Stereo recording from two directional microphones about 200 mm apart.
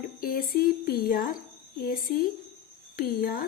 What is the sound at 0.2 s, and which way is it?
A woman's voice, 45° left (ahead or behind).